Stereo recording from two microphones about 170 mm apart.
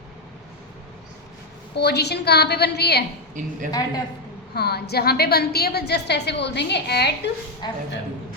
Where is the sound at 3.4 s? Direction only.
50° right (ahead or behind).